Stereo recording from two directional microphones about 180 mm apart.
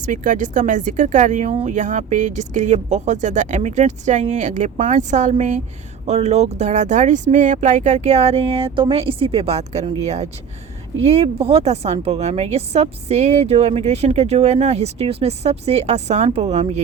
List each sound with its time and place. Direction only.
0.0 s a woman's voice: 45° right (ahead or behind)